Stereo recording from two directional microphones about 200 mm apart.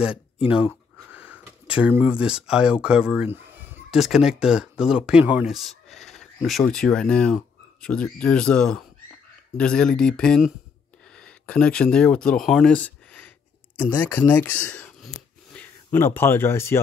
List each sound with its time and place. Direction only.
1.1 s speech: 10° right (ahead or behind); by 16.8 s 10° left (ahead or behind)